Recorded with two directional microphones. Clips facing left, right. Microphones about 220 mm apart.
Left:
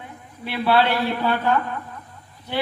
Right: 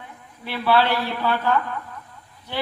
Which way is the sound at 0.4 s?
20° left (ahead or behind).